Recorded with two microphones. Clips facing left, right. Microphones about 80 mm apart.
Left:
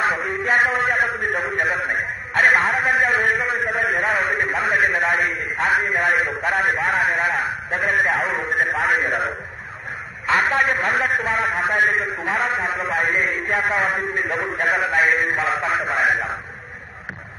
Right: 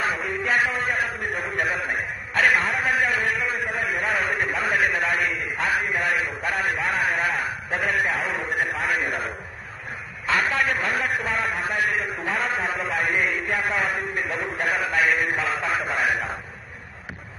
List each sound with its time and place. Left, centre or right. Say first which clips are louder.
0.3 s a sound: left 3 dB; left
1.1 s a man's voice: left 5 dB; left
1.6 s a man's voice: left 1 dB; left
8.1 s a man's voice: left 4 dB; left
8.8 s a man's voice: left 5 dB; left
10.2 s a man's voice: left 4 dB; left
11.0 s a man's voice: left 4 dB; left
12.7 s a man's voice: left 3 dB; left
13.2 s a man's voice: left 3 dB; left
14.2 s a man's voice: left 4 dB; left
14.6 s a man's voice: left 4 dB; left